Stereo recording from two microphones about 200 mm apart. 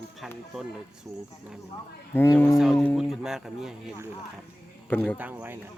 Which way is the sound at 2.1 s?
10° left (ahead or behind).